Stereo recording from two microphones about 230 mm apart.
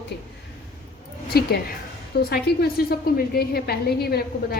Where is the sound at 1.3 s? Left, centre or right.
Left.